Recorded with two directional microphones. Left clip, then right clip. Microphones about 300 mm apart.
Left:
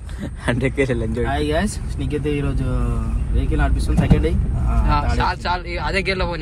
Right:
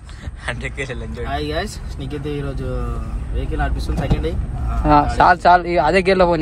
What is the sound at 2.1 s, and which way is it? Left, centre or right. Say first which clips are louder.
Speech: left 3 dB; left.